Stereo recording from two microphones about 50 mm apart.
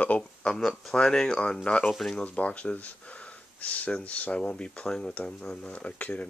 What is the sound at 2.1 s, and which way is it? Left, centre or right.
Speech, left.